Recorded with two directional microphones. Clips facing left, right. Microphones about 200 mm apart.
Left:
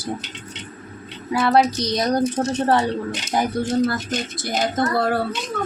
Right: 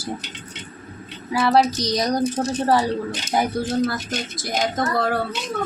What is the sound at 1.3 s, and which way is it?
Speech, 5° right (ahead or behind).